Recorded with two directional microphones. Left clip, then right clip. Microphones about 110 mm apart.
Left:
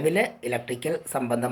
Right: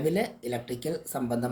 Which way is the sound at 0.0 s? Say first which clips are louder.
Left 5 dB; 25° right (ahead or behind).